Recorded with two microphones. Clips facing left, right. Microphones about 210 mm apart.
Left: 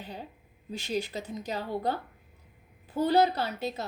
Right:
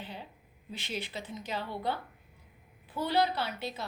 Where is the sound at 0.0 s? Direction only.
40° left (ahead or behind).